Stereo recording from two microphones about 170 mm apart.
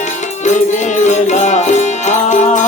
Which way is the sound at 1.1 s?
45° left (ahead or behind).